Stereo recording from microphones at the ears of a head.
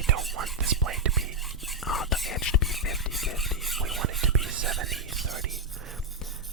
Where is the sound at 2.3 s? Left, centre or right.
Left.